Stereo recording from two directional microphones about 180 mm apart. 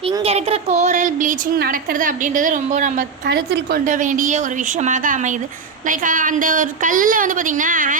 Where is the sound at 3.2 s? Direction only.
60° right (ahead or behind).